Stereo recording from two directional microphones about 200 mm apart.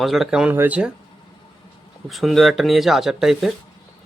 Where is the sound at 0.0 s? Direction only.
Centre (ahead or behind).